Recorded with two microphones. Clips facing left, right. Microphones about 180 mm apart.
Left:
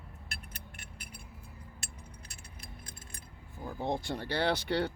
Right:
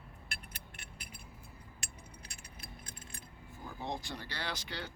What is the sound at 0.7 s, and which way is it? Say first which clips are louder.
Keys jangling: left 2 dB; 50° left (ahead or behind).